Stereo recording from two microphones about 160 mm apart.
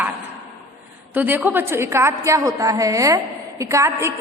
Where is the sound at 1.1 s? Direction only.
10° right (ahead or behind).